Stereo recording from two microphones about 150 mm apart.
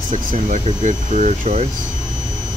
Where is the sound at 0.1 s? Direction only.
55° right (ahead or behind).